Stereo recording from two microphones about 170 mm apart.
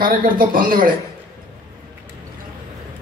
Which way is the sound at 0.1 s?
55° right (ahead or behind).